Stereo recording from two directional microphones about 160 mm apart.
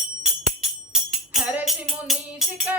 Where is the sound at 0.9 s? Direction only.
5° right (ahead or behind).